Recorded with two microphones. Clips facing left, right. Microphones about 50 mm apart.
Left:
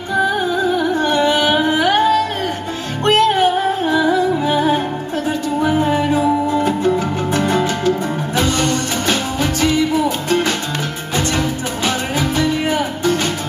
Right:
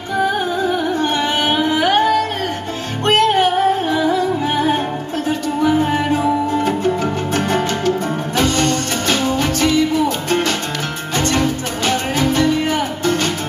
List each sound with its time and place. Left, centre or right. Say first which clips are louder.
1.0 s carnatic music: left 3 dB; right
1.8 s music: right 1 dB; right
4.0 s music: left 4 dB; left
4.5 s music: left 1 dB; right
5.6 s music: right 2 dB; left
5.9 s music: left 1 dB; right
9.6 s music: left 1 dB; left
11.1 s music: right 1 dB; right
11.8 s music: right 2 dB; centre